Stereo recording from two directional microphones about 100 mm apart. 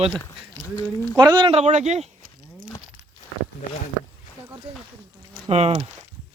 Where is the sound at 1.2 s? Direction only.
40° right (ahead or behind).